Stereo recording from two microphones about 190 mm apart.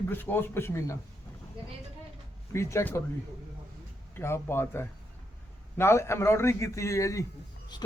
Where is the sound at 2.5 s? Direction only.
15° left (ahead or behind).